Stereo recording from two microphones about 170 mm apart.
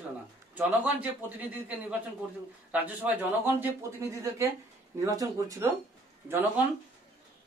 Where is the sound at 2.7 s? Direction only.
10° right (ahead or behind).